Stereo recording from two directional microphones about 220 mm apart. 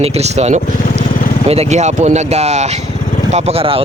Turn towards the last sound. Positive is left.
turn(degrees=-25)  # may be behind; listen again after turning